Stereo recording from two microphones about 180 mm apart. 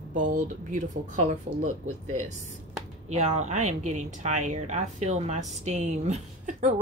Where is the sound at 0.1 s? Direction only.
45° right (ahead or behind).